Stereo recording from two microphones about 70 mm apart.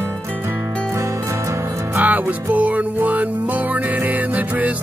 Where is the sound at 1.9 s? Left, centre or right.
Right.